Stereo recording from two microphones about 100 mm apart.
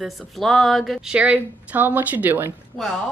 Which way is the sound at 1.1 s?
10° right (ahead or behind).